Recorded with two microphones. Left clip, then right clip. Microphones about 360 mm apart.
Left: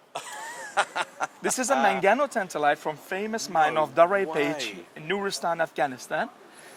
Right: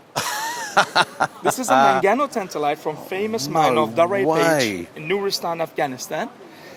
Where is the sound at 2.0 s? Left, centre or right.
Left.